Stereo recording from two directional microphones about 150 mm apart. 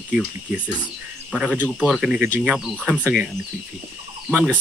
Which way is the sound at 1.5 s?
10° left (ahead or behind).